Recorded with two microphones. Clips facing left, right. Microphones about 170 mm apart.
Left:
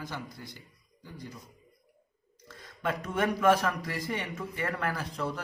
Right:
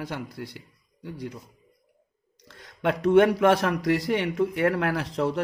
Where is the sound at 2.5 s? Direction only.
70° right (ahead or behind).